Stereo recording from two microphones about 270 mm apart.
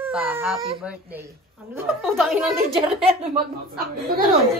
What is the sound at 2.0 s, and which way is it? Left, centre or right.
Speech, centre.